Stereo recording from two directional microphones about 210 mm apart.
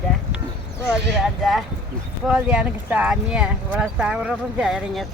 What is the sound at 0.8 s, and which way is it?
Speech, centre (ahead or behind).